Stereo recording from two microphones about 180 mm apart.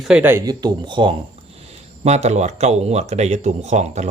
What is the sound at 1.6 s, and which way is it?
Speech, 40° right (ahead or behind).